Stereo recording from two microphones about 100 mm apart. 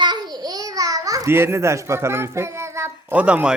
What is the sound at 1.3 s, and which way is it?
A child's voice, 25° right (ahead or behind).